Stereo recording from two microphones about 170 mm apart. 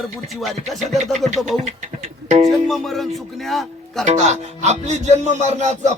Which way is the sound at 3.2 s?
Centre (ahead or behind).